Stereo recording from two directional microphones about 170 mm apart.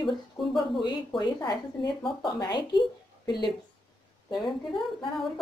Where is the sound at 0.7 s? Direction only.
25° left (ahead or behind).